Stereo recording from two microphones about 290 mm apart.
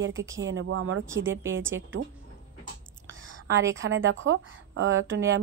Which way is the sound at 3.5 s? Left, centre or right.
Right.